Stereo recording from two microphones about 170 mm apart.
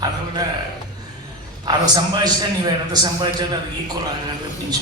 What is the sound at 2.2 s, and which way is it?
Speech, 25° right (ahead or behind).